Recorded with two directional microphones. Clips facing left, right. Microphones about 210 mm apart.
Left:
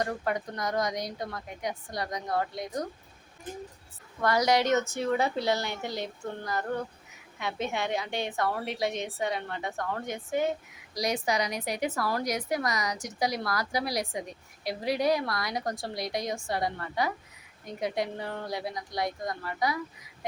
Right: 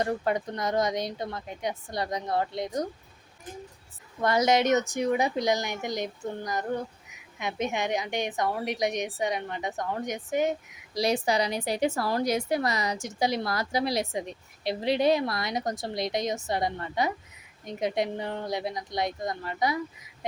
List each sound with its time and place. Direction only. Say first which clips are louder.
0.0 s a woman's voice: right 3 dB; 25° right (ahead or behind)
4.2 s a woman's voice: right 2 dB; 20° right (ahead or behind)
10.9 s a woman's voice: right 3 dB; 30° right (ahead or behind)